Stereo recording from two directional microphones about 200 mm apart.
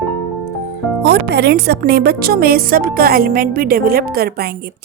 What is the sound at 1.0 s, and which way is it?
Speech, 55° right (ahead or behind).